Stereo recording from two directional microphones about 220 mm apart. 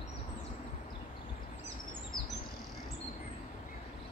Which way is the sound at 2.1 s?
20° left (ahead or behind).